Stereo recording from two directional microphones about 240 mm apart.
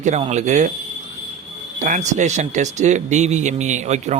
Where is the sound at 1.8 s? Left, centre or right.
Right.